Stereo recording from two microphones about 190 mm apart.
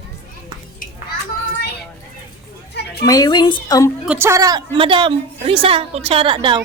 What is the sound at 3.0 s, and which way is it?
Speech, 20° left (ahead or behind).